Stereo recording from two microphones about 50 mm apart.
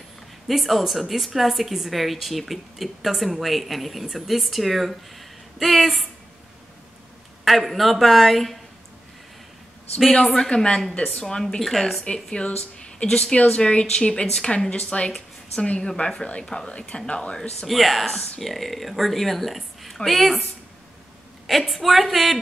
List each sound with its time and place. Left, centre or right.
0.5 s a woman's voice: centre
7.4 s a woman's voice: centre
10.3 s a woman's voice: centre
10.8 s a woman's voice: centre
12.0 s a woman's voice: centre
17.6 s a woman's voice: centre
21.5 s a woman's voice: centre